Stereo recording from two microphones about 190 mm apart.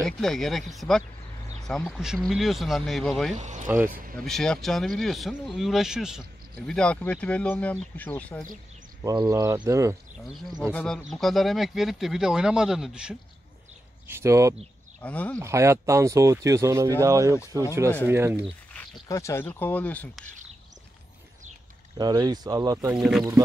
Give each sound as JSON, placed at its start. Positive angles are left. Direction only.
{"t": 0.0, "sound": "speech", "side_deg": 0}
{"t": 3.3, "sound": "speech", "side_deg": -40}
{"t": 3.6, "sound": "speech", "side_deg": -10}
{"t": 4.2, "sound": "speech", "side_deg": 0}
{"t": 9.0, "sound": "speech", "side_deg": -20}
{"t": 10.6, "sound": "speech", "side_deg": 5}
{"t": 15.0, "sound": "speech", "side_deg": 5}
{"t": 15.3, "sound": "speech", "side_deg": -15}
{"t": 19.0, "sound": "speech", "side_deg": 15}
{"t": 21.9, "sound": "speech", "side_deg": -20}
{"t": 22.9, "sound": "speech", "side_deg": 0}